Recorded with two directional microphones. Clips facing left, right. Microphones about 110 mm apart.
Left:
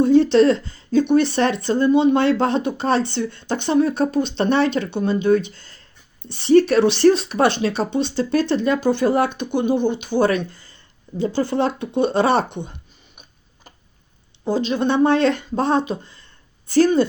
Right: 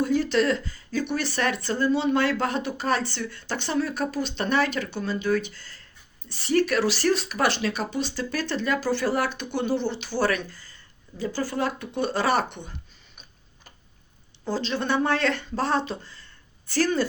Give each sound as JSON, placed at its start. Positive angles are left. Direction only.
{"t": 0.0, "sound": "speech", "side_deg": 25}
{"t": 14.4, "sound": "speech", "side_deg": 15}